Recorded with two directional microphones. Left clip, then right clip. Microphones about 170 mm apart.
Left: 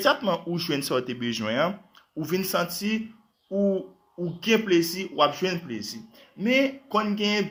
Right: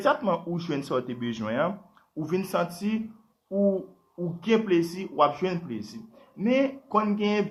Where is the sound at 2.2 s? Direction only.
20° left (ahead or behind).